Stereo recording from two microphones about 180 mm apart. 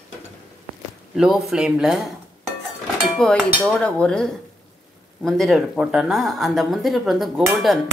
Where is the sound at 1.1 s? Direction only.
Centre (ahead or behind).